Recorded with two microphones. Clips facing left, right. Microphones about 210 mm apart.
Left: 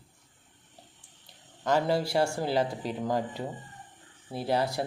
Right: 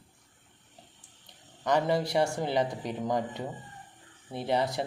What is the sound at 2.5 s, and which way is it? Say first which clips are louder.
Speech: left 1 dB; 5° left (ahead or behind).